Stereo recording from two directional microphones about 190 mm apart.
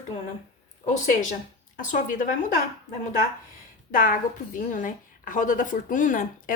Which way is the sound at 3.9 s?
45° left (ahead or behind).